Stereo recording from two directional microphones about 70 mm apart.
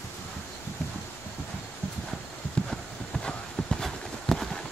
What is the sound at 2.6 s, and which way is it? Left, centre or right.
Clip-clop, centre.